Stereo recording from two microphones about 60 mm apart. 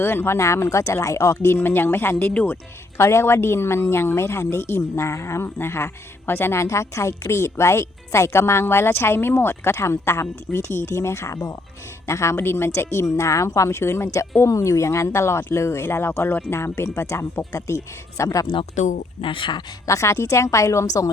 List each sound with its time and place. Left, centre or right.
0.0 s speech: left
0.3 s speech: left
2.3 s speech: left
3.0 s speech: left
4.8 s speech: left
6.6 s speech: left
14.4 s speech: left
18.2 s speech: left
19.9 s a woman's voice: left